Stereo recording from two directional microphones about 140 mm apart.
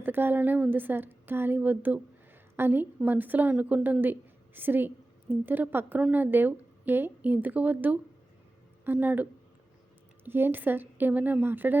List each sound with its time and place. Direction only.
0.0 s a woman's voice: 15° right (ahead or behind)
10.2 s a woman's voice: 15° right (ahead or behind)